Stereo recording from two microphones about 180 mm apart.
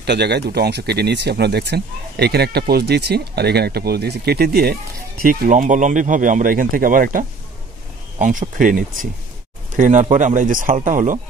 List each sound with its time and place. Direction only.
0.0 s speech: 65° right (ahead or behind); by 11.1 s 45° right (ahead or behind)